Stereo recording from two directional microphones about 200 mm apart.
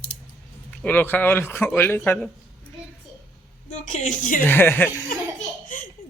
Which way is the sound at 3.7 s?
35° left (ahead or behind).